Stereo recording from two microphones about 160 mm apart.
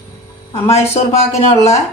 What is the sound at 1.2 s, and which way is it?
Speech, 45° left (ahead or behind).